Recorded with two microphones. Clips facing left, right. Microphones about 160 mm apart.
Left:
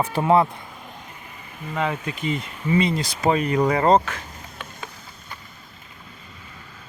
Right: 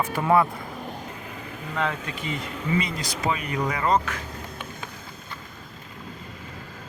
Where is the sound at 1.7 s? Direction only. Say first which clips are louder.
Left 2 dB; 10° left (ahead or behind).